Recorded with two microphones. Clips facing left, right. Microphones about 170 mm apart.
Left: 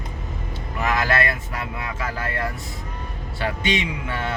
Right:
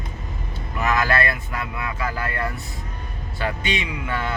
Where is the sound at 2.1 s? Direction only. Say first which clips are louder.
Even; 25° left (ahead or behind).